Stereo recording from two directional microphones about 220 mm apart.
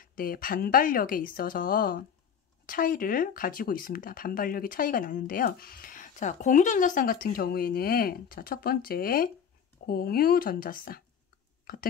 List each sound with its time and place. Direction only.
0.0 s a woman's voice: 40° left (ahead or behind)